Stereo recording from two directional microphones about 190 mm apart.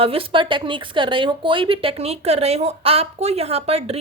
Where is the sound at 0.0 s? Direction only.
30° right (ahead or behind).